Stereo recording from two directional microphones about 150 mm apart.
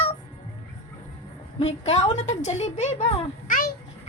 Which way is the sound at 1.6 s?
45° left (ahead or behind).